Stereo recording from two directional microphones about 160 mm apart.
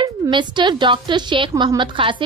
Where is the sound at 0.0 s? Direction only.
30° right (ahead or behind).